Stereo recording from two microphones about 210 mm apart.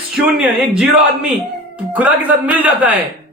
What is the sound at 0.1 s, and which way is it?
A man's voice, centre (ahead or behind).